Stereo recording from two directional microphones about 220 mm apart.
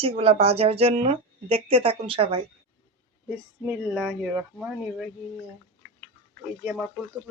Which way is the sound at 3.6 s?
Centre (ahead or behind).